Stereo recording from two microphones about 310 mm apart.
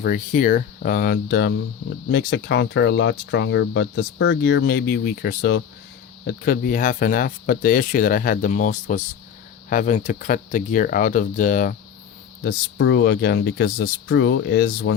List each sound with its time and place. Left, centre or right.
0.0 s speech: left